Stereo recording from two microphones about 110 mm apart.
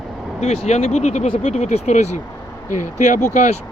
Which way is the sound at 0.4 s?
75° left (ahead or behind).